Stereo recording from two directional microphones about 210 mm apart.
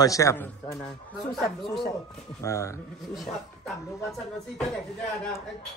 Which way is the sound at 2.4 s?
15° left (ahead or behind).